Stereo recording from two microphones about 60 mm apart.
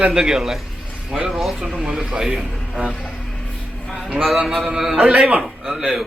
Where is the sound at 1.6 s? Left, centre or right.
Centre.